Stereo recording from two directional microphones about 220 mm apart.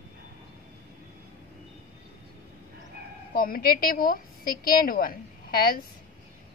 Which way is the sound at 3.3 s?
40° left (ahead or behind).